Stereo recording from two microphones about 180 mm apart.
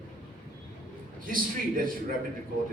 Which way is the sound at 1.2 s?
50° right (ahead or behind).